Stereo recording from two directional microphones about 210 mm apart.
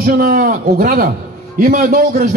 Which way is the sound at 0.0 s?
45° right (ahead or behind).